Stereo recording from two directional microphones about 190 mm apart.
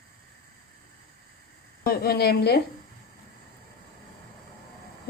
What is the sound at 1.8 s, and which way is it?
Speech, 50° left (ahead or behind).